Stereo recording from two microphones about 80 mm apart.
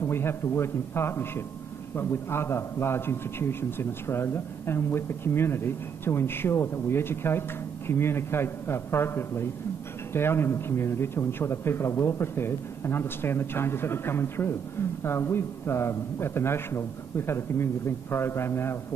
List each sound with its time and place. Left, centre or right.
0.0 s a man's voice: left